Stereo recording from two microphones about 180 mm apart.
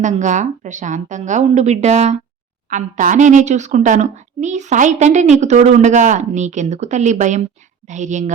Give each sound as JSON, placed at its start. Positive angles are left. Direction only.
{"t": 0.0, "sound": "speech", "side_deg": -40}